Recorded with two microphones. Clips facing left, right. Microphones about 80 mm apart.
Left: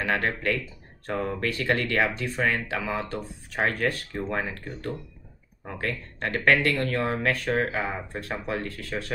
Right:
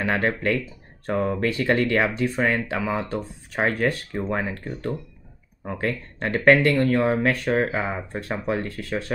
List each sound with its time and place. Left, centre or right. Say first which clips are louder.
0.0 s speech: right 3 dB; right
5.8 s speech: right 3 dB; centre